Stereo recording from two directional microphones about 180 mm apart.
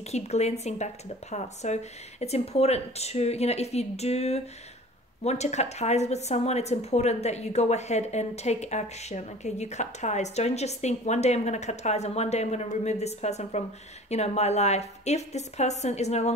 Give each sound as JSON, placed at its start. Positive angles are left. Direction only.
{"t": 0.0, "sound": "a woman's voice", "side_deg": 35}